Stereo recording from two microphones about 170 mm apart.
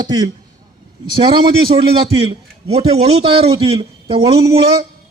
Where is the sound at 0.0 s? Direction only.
25° right (ahead or behind).